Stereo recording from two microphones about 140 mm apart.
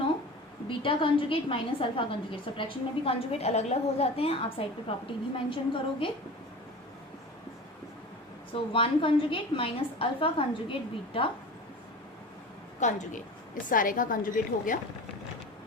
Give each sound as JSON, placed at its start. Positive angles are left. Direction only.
{"t": 0.7, "sound": "a woman's voice", "side_deg": 40}
{"t": 8.5, "sound": "a woman's voice", "side_deg": 40}
{"t": 12.8, "sound": "a woman's voice", "side_deg": 60}
{"t": 13.7, "sound": "a woman's voice", "side_deg": 75}